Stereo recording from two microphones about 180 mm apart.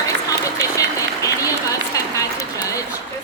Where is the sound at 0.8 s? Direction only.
20° left (ahead or behind).